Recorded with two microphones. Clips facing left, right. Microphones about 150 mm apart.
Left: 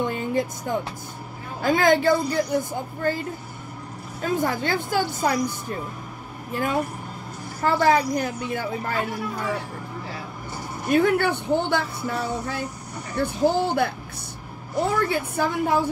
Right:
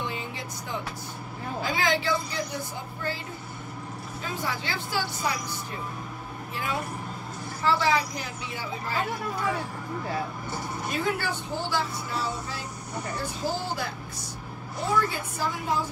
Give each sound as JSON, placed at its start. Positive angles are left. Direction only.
{"t": 0.0, "sound": "music", "side_deg": 50}
{"t": 1.6, "sound": "a woman's voice", "side_deg": 50}
{"t": 6.5, "sound": "a woman's voice", "side_deg": 50}
{"t": 10.9, "sound": "speech", "side_deg": 60}
{"t": 15.0, "sound": "speech", "side_deg": 60}